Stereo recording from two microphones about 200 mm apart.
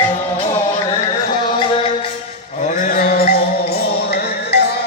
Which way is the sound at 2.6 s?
40° left (ahead or behind).